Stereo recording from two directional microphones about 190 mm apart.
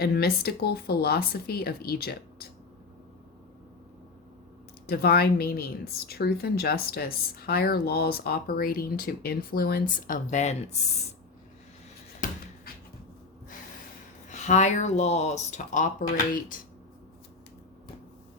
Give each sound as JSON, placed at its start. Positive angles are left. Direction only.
{"t": 0.0, "sound": "speech", "side_deg": 55}
{"t": 4.9, "sound": "speech", "side_deg": 55}
{"t": 9.9, "sound": "speech", "side_deg": 40}
{"t": 12.2, "sound": "a sound", "side_deg": 45}
{"t": 14.3, "sound": "speech", "side_deg": 40}